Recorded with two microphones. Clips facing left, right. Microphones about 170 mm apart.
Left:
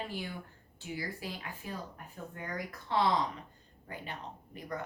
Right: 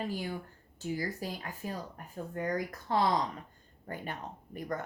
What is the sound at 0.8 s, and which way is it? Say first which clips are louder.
Speech: right 5 dB; 40° right (ahead or behind).